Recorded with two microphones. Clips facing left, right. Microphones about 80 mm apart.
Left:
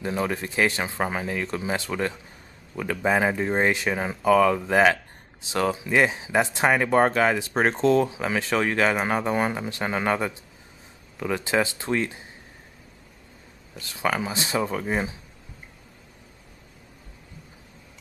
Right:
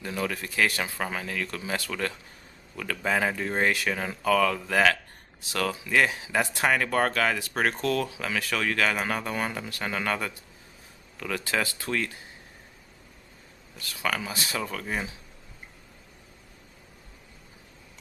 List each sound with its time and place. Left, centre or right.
0.0 s speech: left
13.7 s speech: left